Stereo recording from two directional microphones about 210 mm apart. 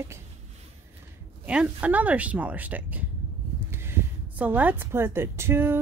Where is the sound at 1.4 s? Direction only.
5° right (ahead or behind).